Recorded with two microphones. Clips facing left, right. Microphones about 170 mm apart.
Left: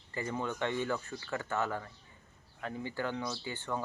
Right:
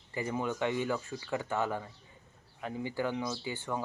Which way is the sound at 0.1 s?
15° right (ahead or behind).